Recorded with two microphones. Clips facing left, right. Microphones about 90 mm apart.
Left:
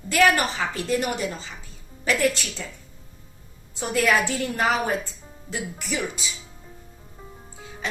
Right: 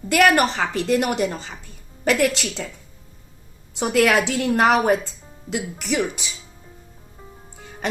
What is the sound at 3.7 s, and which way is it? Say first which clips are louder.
A woman's voice: right 4 dB; 90° right.